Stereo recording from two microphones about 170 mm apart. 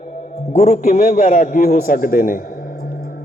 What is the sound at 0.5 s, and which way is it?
A man's voice, 45° left (ahead or behind).